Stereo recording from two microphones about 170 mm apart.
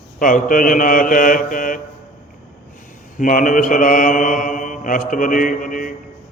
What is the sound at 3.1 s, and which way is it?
Mantra, 50° left (ahead or behind).